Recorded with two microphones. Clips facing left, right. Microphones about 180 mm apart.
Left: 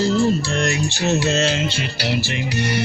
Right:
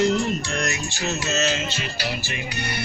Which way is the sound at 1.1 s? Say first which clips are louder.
Left 7 dB; 55° left (ahead or behind).